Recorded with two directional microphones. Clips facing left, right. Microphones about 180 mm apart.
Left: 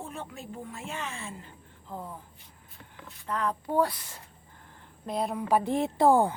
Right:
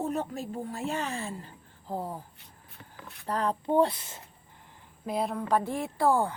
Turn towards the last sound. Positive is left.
turn(degrees=20)  # may be behind; listen again after turning